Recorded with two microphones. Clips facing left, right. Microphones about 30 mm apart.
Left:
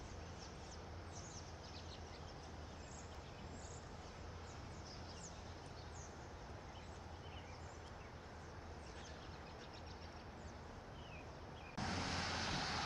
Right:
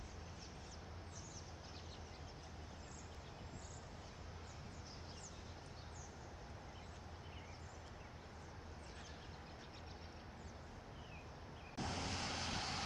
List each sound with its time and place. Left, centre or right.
11.7 s vehicle: centre